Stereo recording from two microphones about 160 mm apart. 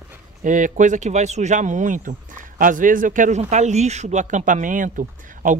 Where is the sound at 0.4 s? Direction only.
55° right (ahead or behind).